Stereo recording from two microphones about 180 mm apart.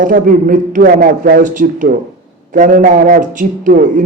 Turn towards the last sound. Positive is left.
turn(degrees=-45)  # may be behind; listen again after turning